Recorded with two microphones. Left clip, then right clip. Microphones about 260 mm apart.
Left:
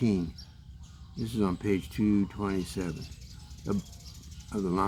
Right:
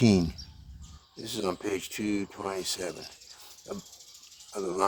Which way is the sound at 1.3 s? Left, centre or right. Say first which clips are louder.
Left 1 dB; right.